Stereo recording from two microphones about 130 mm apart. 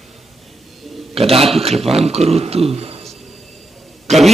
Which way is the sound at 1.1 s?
50° right (ahead or behind).